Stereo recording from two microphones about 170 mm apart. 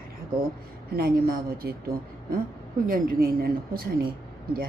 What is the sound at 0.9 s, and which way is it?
Speech, 60° right (ahead or behind).